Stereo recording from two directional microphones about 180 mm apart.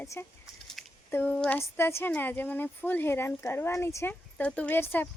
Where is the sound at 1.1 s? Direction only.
10° left (ahead or behind).